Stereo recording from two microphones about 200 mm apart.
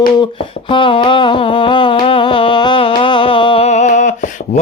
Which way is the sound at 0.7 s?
25° left (ahead or behind).